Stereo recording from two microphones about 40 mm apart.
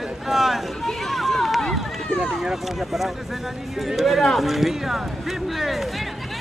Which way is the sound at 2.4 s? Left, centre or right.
Centre.